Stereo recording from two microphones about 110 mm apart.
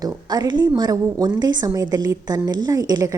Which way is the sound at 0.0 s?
40° right (ahead or behind).